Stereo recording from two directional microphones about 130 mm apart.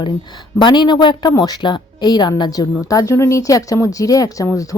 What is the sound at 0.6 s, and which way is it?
A woman's voice, 35° left (ahead or behind).